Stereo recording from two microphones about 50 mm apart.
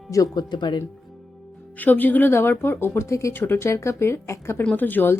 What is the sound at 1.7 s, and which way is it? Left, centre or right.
Speech, left.